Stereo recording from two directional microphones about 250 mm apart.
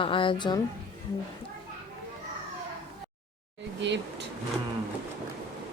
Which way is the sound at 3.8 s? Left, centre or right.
Right.